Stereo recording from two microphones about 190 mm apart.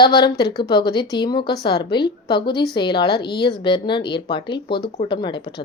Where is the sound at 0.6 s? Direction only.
25° left (ahead or behind).